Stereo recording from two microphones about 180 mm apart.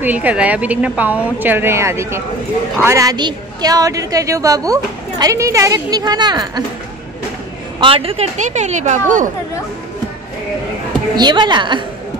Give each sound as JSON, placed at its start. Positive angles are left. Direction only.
{"t": 0.0, "sound": "a woman's voice", "side_deg": -10}
{"t": 7.8, "sound": "speech", "side_deg": -30}
{"t": 11.1, "sound": "a woman's voice", "side_deg": -25}